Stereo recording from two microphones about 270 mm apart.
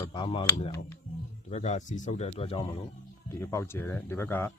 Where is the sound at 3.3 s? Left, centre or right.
Centre.